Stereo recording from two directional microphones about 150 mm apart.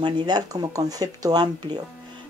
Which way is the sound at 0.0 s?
30° right (ahead or behind).